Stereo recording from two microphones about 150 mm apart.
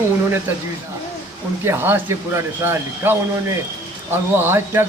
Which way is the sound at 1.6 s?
15° right (ahead or behind).